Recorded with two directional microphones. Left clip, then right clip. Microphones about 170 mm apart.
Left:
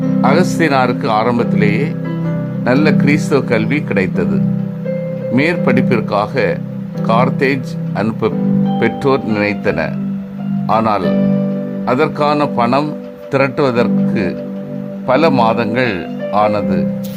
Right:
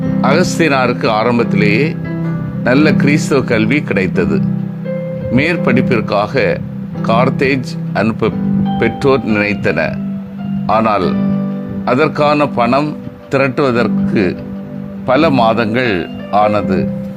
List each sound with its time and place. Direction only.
0.2 s speech: 10° right (ahead or behind)